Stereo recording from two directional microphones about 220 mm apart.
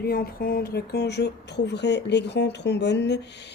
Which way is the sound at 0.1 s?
40° left (ahead or behind).